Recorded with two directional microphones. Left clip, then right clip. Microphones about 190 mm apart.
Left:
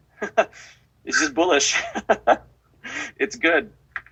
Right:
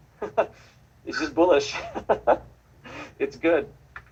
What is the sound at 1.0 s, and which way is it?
Speech, 25° left (ahead or behind).